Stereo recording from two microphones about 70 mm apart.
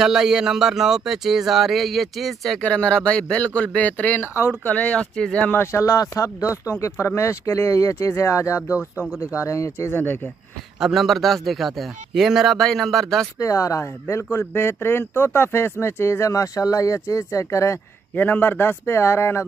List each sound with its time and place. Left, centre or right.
0.0 s speech: centre
2.6 s speech: centre
5.5 s speech: left
5.9 s speech: left
8.6 s speech: right
9.4 s speech: left
9.9 s speech: left
10.8 s speech: centre
13.4 s speech: left
18.1 s speech: left